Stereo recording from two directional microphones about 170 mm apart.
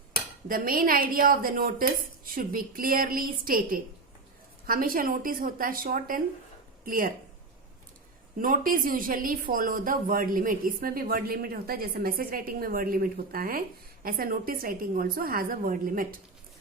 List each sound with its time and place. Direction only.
0.4 s speech: 55° right (ahead or behind)
8.4 s speech: 55° right (ahead or behind)